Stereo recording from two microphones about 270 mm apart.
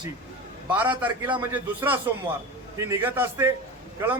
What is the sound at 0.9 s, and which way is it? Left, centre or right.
A man's voice, centre.